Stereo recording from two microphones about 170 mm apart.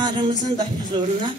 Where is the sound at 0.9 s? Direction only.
30° right (ahead or behind).